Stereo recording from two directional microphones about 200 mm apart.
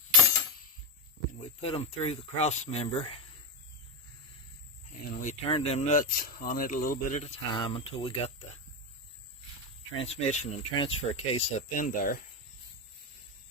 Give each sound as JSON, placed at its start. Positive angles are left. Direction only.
{"t": 1.6, "sound": "speech", "side_deg": 30}
{"t": 5.2, "sound": "speech", "side_deg": 35}
{"t": 9.9, "sound": "speech", "side_deg": 30}